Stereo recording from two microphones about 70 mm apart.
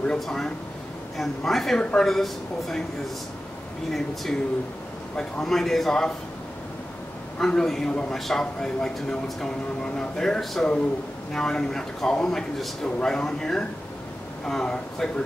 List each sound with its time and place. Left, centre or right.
0.0 s a man's voice: centre
1.8 s a man's voice: centre
2.0 s a man's voice: centre
3.9 s a man's voice: centre
7.3 s a man's voice: centre